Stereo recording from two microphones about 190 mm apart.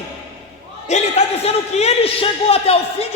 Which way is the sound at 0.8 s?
35° left (ahead or behind).